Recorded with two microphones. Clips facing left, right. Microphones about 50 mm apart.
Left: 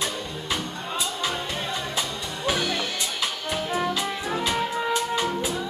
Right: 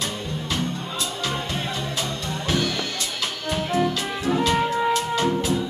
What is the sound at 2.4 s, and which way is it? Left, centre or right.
Music, centre.